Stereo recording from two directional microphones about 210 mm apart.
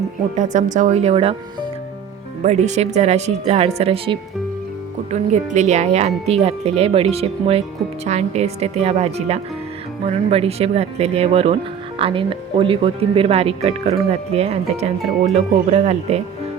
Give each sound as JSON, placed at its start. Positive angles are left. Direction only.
{"t": 0.3, "sound": "speech", "side_deg": -35}
{"t": 2.4, "sound": "speech", "side_deg": -35}